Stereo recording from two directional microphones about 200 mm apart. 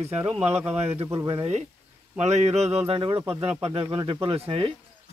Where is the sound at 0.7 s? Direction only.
30° right (ahead or behind).